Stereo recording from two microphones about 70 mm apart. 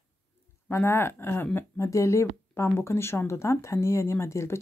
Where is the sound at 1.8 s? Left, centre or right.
Left.